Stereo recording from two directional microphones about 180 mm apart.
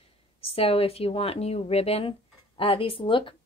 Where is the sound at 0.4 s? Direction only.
30° left (ahead or behind).